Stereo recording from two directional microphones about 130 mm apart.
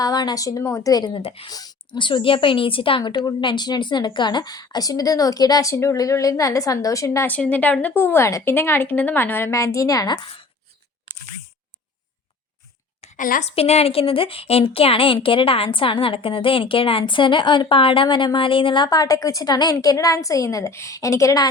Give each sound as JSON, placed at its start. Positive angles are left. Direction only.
{"t": 0.0, "sound": "a woman's voice", "side_deg": 30}
{"t": 7.3, "sound": "a woman's voice", "side_deg": 10}
{"t": 13.1, "sound": "a woman's voice", "side_deg": 90}
{"t": 13.6, "sound": "a woman's voice", "side_deg": 50}